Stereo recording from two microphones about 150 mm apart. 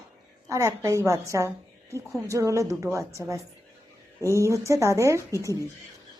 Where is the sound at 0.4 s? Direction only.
20° right (ahead or behind).